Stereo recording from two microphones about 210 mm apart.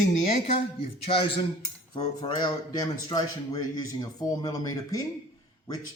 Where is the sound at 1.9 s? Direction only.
20° left (ahead or behind).